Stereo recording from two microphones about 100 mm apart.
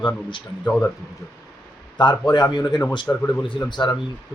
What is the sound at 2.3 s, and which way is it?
Speech, 45° left (ahead or behind).